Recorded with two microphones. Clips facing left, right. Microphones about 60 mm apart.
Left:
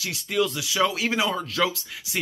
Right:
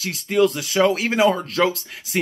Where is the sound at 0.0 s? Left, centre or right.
Right.